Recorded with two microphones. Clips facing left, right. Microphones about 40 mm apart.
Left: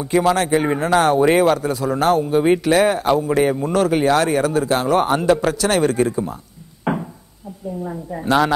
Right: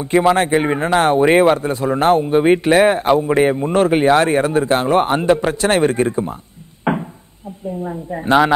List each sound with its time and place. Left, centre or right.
0.0 s speech: right
6.8 s wood: right
8.1 s speech: right